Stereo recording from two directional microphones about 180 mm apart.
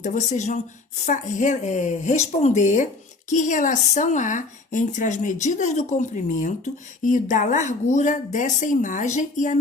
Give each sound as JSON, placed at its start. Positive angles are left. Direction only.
{"t": 0.0, "sound": "speech", "side_deg": 40}